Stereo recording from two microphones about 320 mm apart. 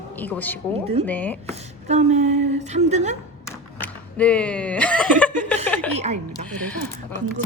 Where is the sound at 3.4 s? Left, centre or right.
Centre.